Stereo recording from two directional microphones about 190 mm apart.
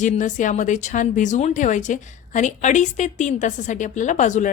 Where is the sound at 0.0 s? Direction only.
40° left (ahead or behind).